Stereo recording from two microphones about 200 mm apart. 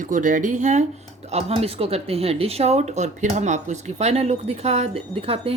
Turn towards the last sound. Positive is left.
turn(degrees=-30)  # may be behind; listen again after turning